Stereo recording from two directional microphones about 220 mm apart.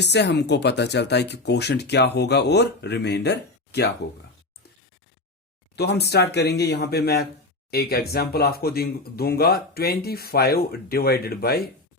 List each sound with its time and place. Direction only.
0.0 s speech: 50° left (ahead or behind)
5.7 s speech: 50° left (ahead or behind)